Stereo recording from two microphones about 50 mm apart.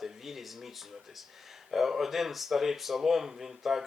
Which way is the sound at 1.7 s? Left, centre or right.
Centre.